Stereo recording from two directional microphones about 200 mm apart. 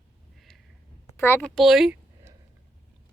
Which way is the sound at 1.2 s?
10° left (ahead or behind).